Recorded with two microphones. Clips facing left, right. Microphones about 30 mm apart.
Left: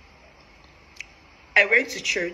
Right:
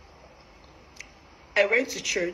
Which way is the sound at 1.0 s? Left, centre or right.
Left.